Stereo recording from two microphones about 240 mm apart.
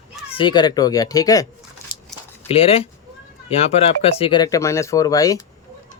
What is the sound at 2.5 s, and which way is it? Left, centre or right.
Speech, left.